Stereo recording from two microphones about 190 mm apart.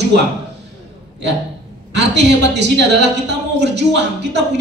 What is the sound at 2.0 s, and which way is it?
A woman's voice, 65° right (ahead or behind).